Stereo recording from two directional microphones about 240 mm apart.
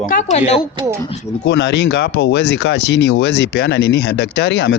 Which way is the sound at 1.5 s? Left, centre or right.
Left.